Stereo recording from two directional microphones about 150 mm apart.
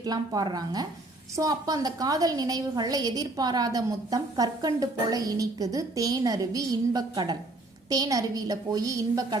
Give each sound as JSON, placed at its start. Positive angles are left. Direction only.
{"t": 0.0, "sound": "a woman's voice", "side_deg": -25}